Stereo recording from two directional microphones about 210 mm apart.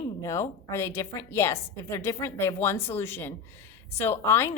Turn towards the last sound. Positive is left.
turn(degrees=10)  # may be behind; listen again after turning